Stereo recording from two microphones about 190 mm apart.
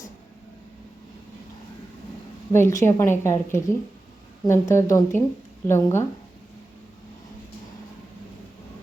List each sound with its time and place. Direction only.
2.5 s a woman's voice: 15° left (ahead or behind)